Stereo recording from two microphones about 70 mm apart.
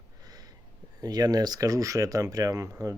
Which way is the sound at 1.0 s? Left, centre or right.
Right.